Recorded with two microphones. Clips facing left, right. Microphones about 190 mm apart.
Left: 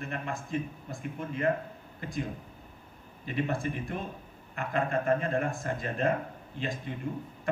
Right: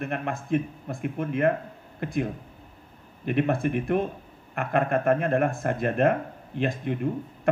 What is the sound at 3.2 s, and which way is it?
Speech, 60° right (ahead or behind).